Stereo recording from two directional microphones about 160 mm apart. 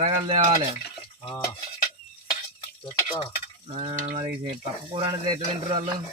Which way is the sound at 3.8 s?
40° right (ahead or behind).